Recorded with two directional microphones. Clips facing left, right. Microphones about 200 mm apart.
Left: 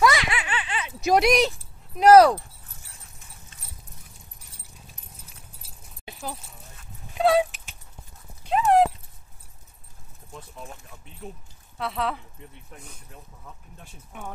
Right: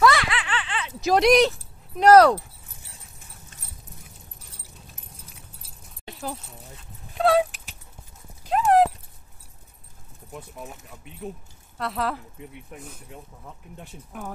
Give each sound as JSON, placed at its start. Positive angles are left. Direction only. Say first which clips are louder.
{"t": 0.0, "sound": "snicker", "louder": "right 2 dB", "side_deg": 15}
{"t": 2.0, "sound": "speech", "louder": "even", "side_deg": 10}
{"t": 7.2, "sound": "keys jangling", "louder": "even", "side_deg": 0}
{"t": 8.5, "sound": "dog", "louder": "right 1 dB", "side_deg": 0}
{"t": 11.2, "sound": "speech", "louder": "right 5 dB", "side_deg": -15}
{"t": 11.8, "sound": "speech", "louder": "right 1 dB", "side_deg": 0}
{"t": 14.1, "sound": "speech", "louder": "right 2 dB", "side_deg": 0}